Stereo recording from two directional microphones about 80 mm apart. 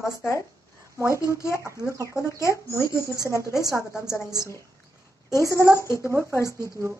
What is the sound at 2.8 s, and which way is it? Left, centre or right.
Speech, left.